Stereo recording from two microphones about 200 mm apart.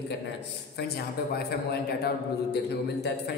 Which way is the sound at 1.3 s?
50° left (ahead or behind).